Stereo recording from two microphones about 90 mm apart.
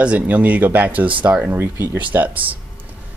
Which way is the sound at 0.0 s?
15° right (ahead or behind).